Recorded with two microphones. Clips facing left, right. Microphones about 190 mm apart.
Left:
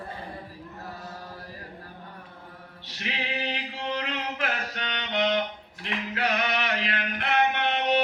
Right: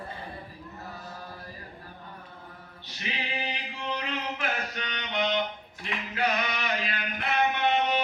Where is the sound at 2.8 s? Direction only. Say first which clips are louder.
Left 2 dB; 70° left (ahead or behind).